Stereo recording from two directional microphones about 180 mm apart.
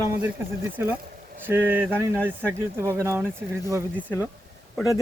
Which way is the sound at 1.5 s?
10° right (ahead or behind).